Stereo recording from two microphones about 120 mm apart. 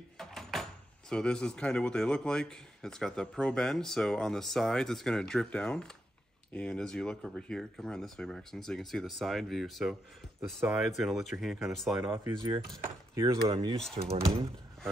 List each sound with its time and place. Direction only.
0.2 s speech: 5° left (ahead or behind)
12.4 s speech: 40° right (ahead or behind)
14.0 s speech: 85° right